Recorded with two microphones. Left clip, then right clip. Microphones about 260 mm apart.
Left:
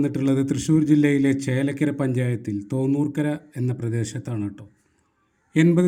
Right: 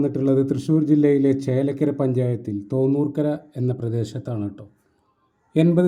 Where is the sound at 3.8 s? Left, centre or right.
Left.